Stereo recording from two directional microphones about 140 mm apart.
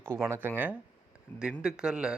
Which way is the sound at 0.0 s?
20° right (ahead or behind).